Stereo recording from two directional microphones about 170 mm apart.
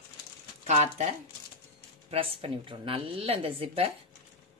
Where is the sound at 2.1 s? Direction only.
35° right (ahead or behind).